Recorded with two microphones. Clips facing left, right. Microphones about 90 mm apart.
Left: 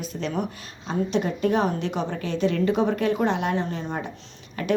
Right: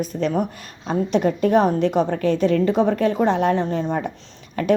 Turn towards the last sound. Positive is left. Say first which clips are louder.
# right 6 dB
turn(degrees=-40)  # may be behind; listen again after turning